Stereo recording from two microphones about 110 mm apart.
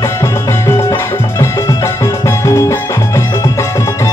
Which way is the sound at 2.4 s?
30° left (ahead or behind).